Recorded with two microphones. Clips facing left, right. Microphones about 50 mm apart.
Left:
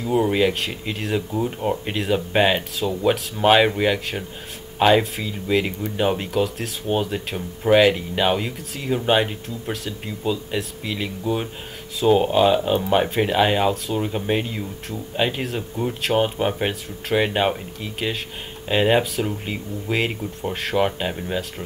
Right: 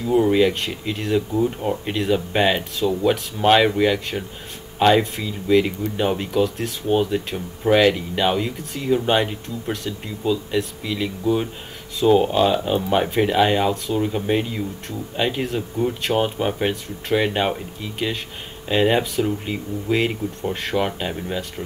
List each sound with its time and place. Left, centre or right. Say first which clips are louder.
0.0 s speech: right 2 dB; centre